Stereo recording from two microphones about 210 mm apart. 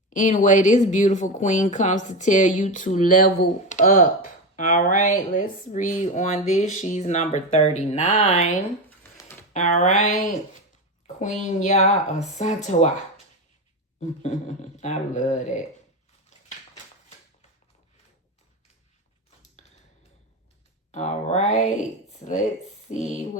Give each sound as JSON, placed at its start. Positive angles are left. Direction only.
{"t": 0.1, "sound": "a woman's voice", "side_deg": 35}
{"t": 14.2, "sound": "speech", "side_deg": 35}
{"t": 20.9, "sound": "speech", "side_deg": 35}